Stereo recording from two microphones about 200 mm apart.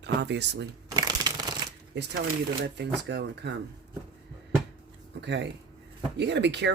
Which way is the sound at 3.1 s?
60° right (ahead or behind).